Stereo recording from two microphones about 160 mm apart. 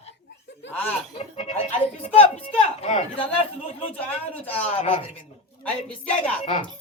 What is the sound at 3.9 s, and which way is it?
Speech, 10° left (ahead or behind).